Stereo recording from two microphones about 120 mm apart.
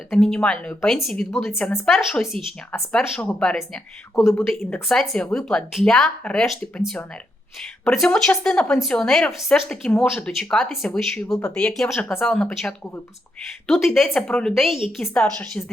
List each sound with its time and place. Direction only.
0.1 s a woman's voice: 5° left (ahead or behind)
1.5 s speech: 15° left (ahead or behind)
2.3 s speech: 50° right (ahead or behind)
3.2 s speech: 10° left (ahead or behind)
4.1 s speech: 25° left (ahead or behind)
4.4 s a woman's voice: 5° left (ahead or behind)